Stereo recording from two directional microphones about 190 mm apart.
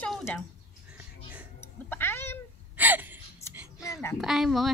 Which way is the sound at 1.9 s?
10° left (ahead or behind).